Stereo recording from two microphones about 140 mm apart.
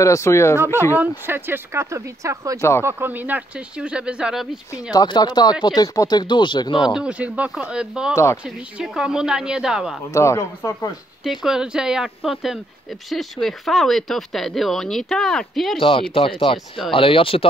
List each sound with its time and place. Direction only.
0.0 s speech: 20° left (ahead or behind)
0.9 s speech: 15° right (ahead or behind)
4.9 s speech: 30° left (ahead or behind)
7.0 s speech: 10° right (ahead or behind)
8.1 s speech: 20° left (ahead or behind)
8.5 s speech: 5° right (ahead or behind)
10.1 s speech: 20° left (ahead or behind)
11.2 s speech: 5° right (ahead or behind)
15.8 s speech: 40° left (ahead or behind)